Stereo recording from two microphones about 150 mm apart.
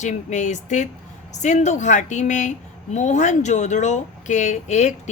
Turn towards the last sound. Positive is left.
turn(degrees=50)  # may be behind; listen again after turning